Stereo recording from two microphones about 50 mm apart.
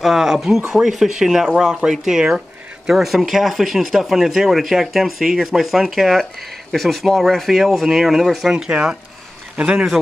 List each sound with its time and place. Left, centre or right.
0.0 s speech: centre
9.6 s a man's voice: right